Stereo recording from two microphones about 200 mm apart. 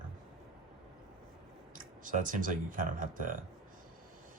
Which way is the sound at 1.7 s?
40° right (ahead or behind).